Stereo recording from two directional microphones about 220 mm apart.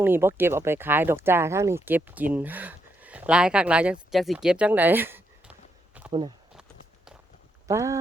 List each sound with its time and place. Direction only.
0.0 s speech: 10° right (ahead or behind)
4.1 s a sound: centre (ahead or behind)
6.1 s speech: 20° right (ahead or behind)
7.7 s speech: 15° right (ahead or behind)